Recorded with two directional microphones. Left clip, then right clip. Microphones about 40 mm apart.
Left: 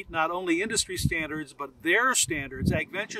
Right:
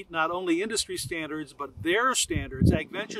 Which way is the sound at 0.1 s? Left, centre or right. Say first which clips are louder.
Even; left.